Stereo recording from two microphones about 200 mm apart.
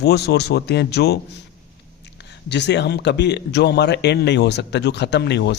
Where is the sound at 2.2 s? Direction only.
60° left (ahead or behind).